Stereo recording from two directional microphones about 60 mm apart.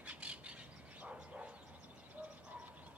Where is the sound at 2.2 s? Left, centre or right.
Right.